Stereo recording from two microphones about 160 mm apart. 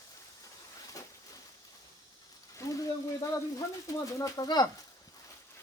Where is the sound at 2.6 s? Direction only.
20° left (ahead or behind).